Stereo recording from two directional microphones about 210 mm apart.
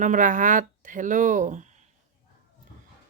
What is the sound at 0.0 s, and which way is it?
Speech, 35° right (ahead or behind).